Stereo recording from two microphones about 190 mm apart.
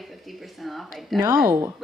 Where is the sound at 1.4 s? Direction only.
10° right (ahead or behind).